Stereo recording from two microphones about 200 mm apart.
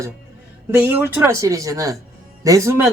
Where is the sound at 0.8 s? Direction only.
10° right (ahead or behind).